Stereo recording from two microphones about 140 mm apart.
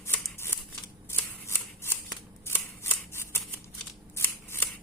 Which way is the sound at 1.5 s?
15° left (ahead or behind).